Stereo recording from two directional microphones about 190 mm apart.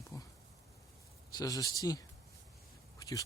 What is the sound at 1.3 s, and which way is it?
Speech, 20° left (ahead or behind).